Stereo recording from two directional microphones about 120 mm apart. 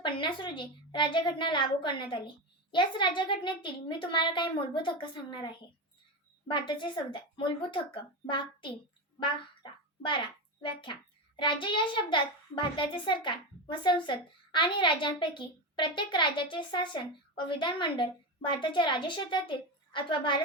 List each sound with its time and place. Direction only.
0.0 s a child's voice: 40° left (ahead or behind)
6.5 s a child's voice: 40° left (ahead or behind)
10.6 s a child's voice: 45° left (ahead or behind)